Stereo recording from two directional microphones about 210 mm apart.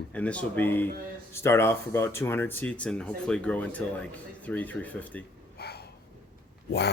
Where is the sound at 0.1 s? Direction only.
5° left (ahead or behind).